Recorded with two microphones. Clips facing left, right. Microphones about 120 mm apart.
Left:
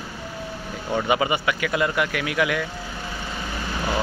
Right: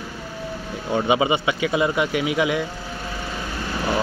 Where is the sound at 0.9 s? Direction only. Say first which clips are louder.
Right 2 dB; 15° right (ahead or behind).